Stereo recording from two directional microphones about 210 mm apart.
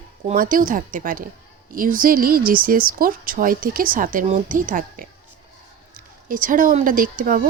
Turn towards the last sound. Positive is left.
turn(degrees=-40)  # may be behind; listen again after turning